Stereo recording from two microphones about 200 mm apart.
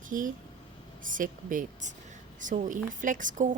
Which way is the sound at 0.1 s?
40° right (ahead or behind).